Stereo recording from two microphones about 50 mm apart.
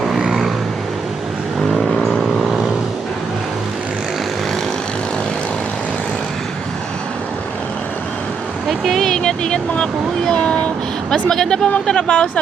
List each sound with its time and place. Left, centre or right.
1.8 s vehicle: centre
9.0 s vehicle: centre
11.1 s speech: centre